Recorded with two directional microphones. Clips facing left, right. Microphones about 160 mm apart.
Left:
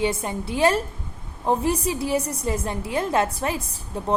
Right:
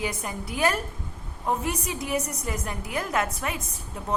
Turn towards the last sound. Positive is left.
turn(degrees=30)  # may be behind; listen again after turning